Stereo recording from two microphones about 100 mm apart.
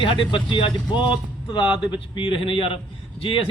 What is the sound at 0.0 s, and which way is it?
Speech, 55° left (ahead or behind).